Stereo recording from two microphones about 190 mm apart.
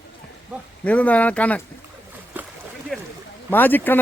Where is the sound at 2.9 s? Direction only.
5° left (ahead or behind).